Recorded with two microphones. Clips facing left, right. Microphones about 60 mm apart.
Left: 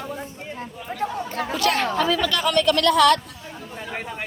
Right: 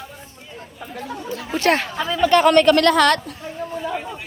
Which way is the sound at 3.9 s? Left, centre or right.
Left.